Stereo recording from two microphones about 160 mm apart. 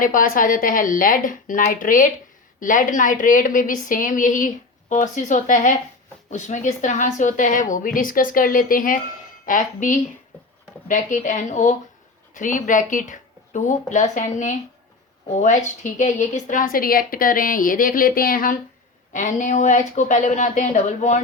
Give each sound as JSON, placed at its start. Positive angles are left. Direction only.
{"t": 0.0, "sound": "a woman's voice", "side_deg": 60}
{"t": 19.1, "sound": "speech", "side_deg": 50}